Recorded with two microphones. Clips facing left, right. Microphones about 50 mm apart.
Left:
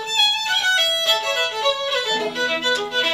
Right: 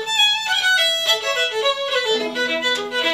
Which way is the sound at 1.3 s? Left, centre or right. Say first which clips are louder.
Right 1 dB; centre.